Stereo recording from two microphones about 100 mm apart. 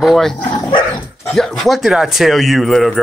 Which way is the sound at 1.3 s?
Centre (ahead or behind).